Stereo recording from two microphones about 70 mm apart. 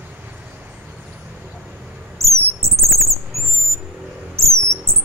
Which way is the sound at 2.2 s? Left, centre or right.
Right.